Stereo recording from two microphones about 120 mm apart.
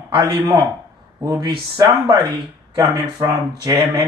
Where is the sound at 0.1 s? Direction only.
40° right (ahead or behind).